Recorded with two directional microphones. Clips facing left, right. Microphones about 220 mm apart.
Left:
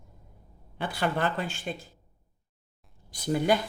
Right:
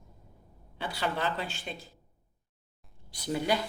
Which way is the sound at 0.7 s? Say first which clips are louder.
Left 4 dB; 50° left (ahead or behind).